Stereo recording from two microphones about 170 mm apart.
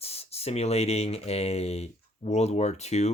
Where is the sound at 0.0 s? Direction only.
35° left (ahead or behind).